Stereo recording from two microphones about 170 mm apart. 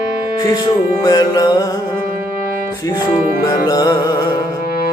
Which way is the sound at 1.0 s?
20° left (ahead or behind).